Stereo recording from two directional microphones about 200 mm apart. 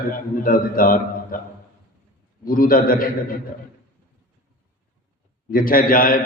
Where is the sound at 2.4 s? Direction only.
45° left (ahead or behind).